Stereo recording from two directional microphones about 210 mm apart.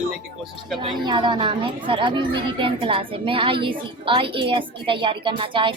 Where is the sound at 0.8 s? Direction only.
25° right (ahead or behind).